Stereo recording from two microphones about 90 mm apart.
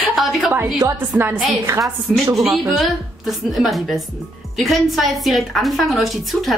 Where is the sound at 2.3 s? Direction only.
5° right (ahead or behind).